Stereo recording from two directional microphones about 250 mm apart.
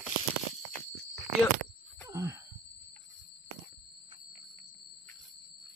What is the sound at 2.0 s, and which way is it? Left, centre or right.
Wail, centre.